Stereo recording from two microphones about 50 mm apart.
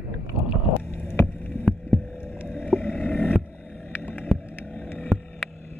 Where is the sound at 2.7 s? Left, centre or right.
Left.